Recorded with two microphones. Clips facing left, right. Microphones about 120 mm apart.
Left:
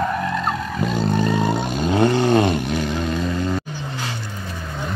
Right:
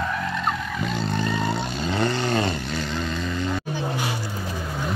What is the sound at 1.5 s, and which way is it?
Vehicle, 50° left (ahead or behind).